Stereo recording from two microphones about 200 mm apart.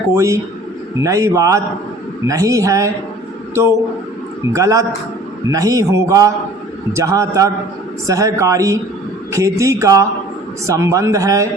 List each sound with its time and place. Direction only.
0.1 s a man's voice: 15° right (ahead or behind)
4.5 s a man's voice: 15° right (ahead or behind)